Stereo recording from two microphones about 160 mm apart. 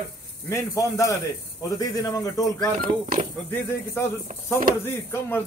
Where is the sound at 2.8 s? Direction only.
60° right (ahead or behind).